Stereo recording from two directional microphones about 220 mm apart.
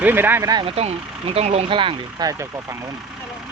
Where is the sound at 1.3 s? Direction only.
30° right (ahead or behind).